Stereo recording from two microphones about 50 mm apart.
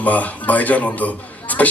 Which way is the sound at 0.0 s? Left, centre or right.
Left.